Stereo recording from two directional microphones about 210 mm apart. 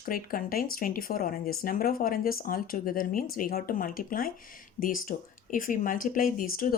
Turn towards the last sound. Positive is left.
turn(degrees=40)  # may be behind; listen again after turning